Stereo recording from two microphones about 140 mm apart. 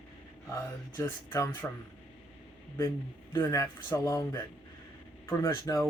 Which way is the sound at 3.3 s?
25° left (ahead or behind).